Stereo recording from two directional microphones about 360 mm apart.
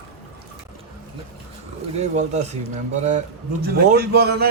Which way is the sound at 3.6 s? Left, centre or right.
Right.